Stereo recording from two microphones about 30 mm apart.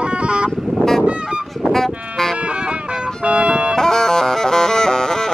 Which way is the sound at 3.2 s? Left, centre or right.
Right.